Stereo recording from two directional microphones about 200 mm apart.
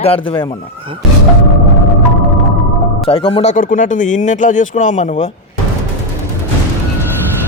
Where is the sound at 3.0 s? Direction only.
30° left (ahead or behind).